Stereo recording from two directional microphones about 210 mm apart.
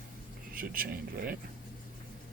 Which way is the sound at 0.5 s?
45° right (ahead or behind).